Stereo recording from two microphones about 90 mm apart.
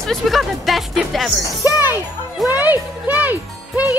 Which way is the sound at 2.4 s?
20° right (ahead or behind).